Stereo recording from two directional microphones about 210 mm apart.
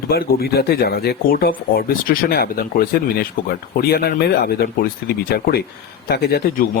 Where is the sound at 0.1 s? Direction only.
45° left (ahead or behind).